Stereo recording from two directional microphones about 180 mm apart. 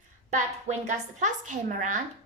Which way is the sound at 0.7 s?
40° right (ahead or behind).